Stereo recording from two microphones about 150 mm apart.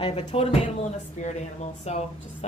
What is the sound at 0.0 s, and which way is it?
Speech, 40° left (ahead or behind).